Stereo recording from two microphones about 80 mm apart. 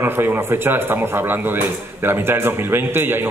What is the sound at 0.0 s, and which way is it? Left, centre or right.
A man's voice, right.